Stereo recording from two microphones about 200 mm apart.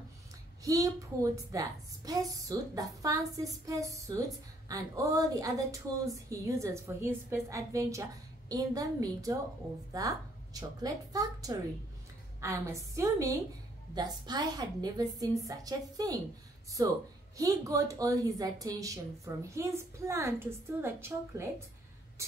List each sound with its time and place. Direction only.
0.7 s a woman's voice: 15° right (ahead or behind)